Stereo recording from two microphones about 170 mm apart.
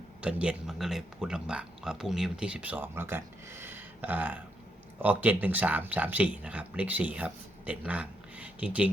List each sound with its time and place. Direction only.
0.2 s speech: 5° right (ahead or behind)